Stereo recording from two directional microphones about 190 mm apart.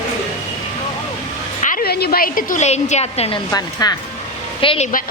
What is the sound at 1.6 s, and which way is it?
A woman's voice, 50° left (ahead or behind).